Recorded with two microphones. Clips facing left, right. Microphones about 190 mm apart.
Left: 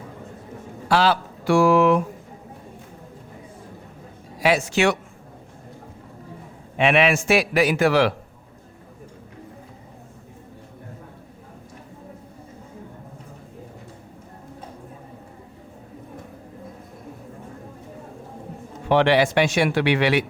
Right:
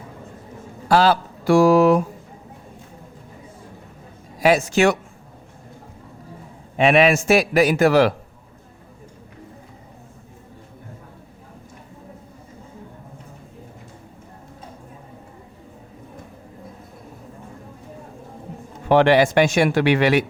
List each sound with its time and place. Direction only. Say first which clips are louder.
0.9 s speech: right 3 dB; 40° right (ahead or behind)
4.4 s speech: right 3 dB; 45° right (ahead or behind)
6.7 s speech: right 3 dB; 40° right (ahead or behind)
18.9 s speech: right 3 dB; 45° right (ahead or behind)